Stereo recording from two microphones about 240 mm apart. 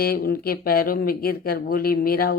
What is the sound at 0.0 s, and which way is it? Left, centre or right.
Speech, left.